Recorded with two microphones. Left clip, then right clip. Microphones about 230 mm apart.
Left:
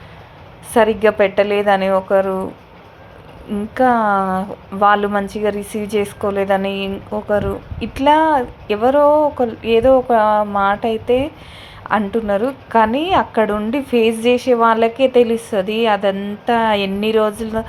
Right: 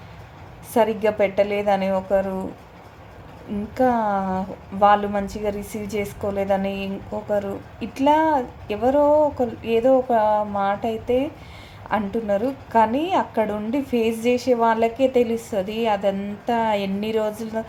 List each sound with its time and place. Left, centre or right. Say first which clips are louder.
0.7 s a woman's voice: left 6 dB; centre
3.8 s a woman's voice: left 6 dB; centre